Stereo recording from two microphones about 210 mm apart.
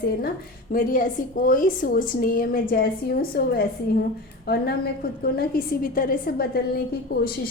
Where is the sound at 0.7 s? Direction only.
40° left (ahead or behind).